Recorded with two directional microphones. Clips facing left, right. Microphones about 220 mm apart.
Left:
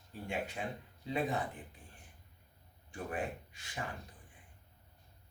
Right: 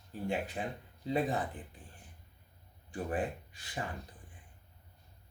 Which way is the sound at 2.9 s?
35° right (ahead or behind).